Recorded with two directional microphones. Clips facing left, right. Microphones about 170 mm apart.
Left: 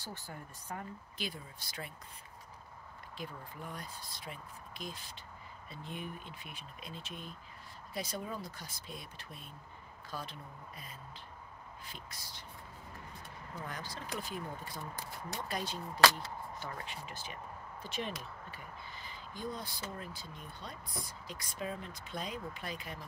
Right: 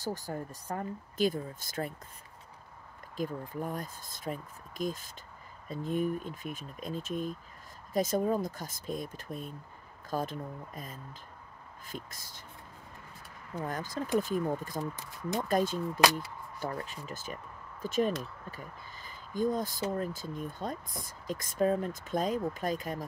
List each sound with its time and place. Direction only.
0.0 s speech: 40° right (ahead or behind)
3.2 s speech: 45° right (ahead or behind)
13.6 s speech: 45° right (ahead or behind)
15.0 s speech: 20° right (ahead or behind)
15.4 s speech: 45° right (ahead or behind)